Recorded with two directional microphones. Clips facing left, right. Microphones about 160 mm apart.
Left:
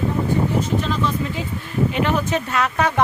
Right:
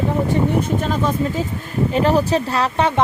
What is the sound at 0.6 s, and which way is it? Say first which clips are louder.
Speech: right 2 dB; 45° right (ahead or behind).